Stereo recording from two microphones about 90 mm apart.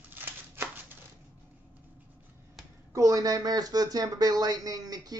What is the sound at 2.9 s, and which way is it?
Speech, 40° right (ahead or behind).